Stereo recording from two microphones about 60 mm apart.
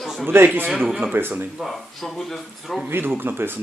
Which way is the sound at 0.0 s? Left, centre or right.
Centre.